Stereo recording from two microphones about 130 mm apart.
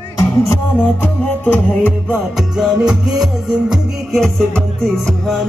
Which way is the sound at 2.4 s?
5° right (ahead or behind).